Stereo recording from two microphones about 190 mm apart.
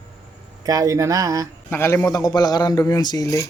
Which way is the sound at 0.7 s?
20° right (ahead or behind).